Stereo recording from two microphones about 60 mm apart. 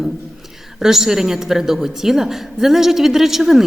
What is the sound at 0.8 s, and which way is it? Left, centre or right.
A woman's voice, centre.